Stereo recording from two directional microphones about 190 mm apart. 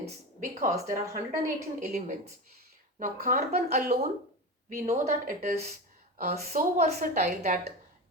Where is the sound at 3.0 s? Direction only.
45° right (ahead or behind).